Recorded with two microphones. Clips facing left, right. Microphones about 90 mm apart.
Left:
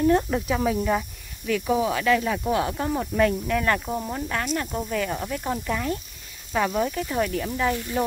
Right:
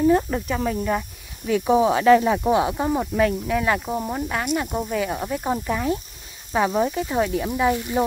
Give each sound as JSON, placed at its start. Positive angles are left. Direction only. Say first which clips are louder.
{"t": 0.0, "sound": "speech", "louder": "right 2 dB", "side_deg": -5}
{"t": 1.4, "sound": "speech", "louder": "right 5 dB", "side_deg": -25}
{"t": 3.2, "sound": "speech", "louder": "left 1 dB", "side_deg": -5}